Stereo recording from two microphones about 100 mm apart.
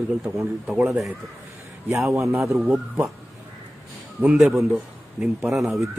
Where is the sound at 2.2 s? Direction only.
30° right (ahead or behind).